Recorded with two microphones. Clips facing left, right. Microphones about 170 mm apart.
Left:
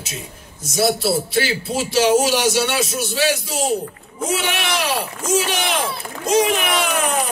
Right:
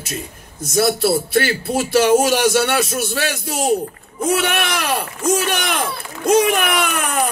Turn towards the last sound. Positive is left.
turn(degrees=-55)  # may be behind; listen again after turning